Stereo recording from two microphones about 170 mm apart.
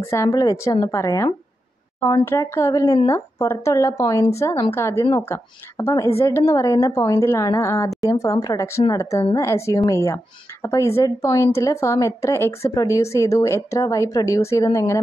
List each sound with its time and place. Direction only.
0.0 s speech: 15° left (ahead or behind)